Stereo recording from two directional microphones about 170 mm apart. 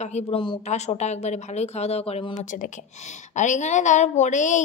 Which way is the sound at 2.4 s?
50° left (ahead or behind).